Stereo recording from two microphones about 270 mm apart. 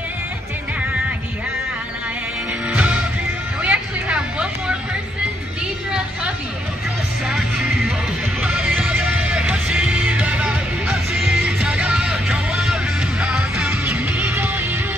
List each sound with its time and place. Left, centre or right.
2.7 s music: centre
3.6 s vehicle: centre
5.9 s a sound: centre
7.2 s music: centre